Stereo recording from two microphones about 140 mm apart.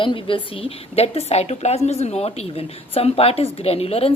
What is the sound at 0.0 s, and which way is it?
A woman's voice, 35° left (ahead or behind).